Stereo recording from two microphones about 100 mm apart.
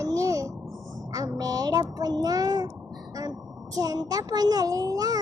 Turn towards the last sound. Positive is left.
turn(degrees=-40)  # may be behind; listen again after turning